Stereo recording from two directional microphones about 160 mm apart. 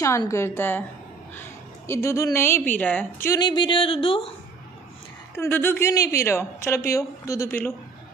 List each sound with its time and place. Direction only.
0.3 s a woman's voice: 15° left (ahead or behind)
1.9 s a woman's voice: 15° left (ahead or behind)
3.3 s a sound: 30° left (ahead or behind)
5.3 s a woman's voice: 15° left (ahead or behind)